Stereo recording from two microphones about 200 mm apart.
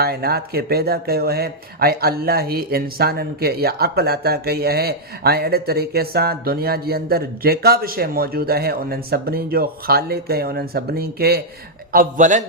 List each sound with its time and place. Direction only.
0.0 s a man's voice: 50° right (ahead or behind)